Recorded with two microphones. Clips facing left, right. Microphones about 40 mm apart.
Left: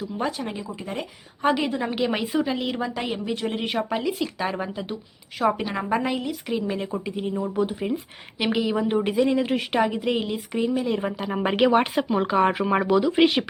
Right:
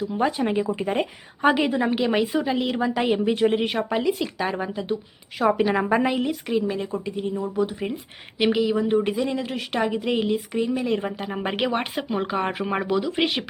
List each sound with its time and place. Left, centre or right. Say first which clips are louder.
0.3 s speech: right 8 dB; right
1.4 s a woman's voice: right 3 dB; centre
2.9 s speech: right 6 dB; centre
3.6 s a woman's voice: right 2 dB; centre
5.6 s speech: right 4 dB; centre
6.4 s a woman's voice: right 2 dB; centre
9.8 s a woman's voice: right 1 dB; centre
11.3 s a woman's voice: left 6 dB; centre